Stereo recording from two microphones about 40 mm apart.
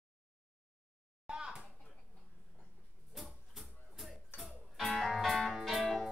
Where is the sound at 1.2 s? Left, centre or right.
Right.